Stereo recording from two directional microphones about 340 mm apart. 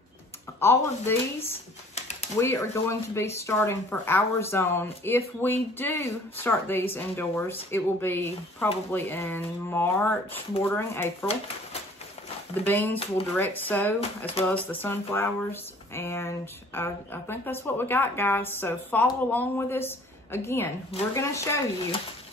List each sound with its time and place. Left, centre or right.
0.6 s speech: centre
12.6 s speech: centre